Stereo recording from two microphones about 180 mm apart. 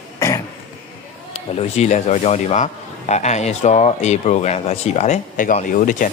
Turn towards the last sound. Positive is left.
turn(degrees=45)  # may be behind; listen again after turning